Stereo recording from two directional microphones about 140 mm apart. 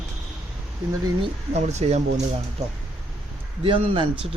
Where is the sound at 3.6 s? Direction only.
40° right (ahead or behind).